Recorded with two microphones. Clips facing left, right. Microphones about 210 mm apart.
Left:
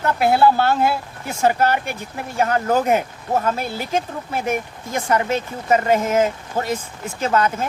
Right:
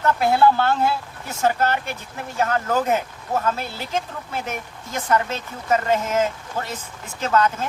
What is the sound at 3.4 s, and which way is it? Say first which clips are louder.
Speech: left 3 dB; 15° left (ahead or behind).